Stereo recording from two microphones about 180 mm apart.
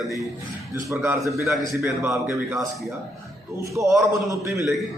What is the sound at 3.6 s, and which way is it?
Mantra, 15° right (ahead or behind).